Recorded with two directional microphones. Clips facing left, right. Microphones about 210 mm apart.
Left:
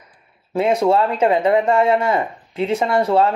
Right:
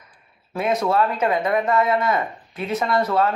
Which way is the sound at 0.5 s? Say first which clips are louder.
Left 5 dB; 30° left (ahead or behind).